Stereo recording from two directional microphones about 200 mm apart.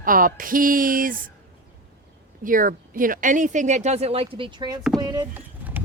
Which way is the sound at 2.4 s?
40° right (ahead or behind).